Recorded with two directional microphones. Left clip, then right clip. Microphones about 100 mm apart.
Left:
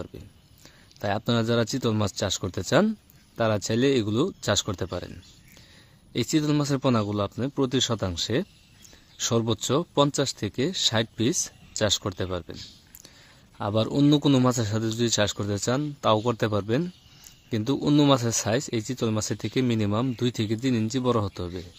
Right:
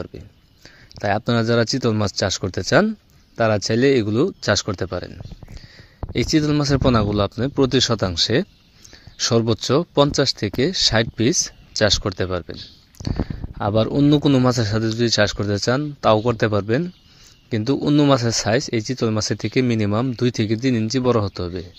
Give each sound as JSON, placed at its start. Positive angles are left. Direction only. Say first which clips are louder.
{"t": 0.9, "sound": "speech", "louder": "right 6 dB", "side_deg": -20}
{"t": 6.1, "sound": "speech", "louder": "right 6 dB", "side_deg": -20}
{"t": 9.1, "sound": "speech", "louder": "right 7 dB", "side_deg": -20}
{"t": 13.6, "sound": "speech", "louder": "right 6 dB", "side_deg": -35}
{"t": 17.8, "sound": "speech", "louder": "right 4 dB", "side_deg": 0}
{"t": 18.1, "sound": "speech", "louder": "right 5 dB", "side_deg": -20}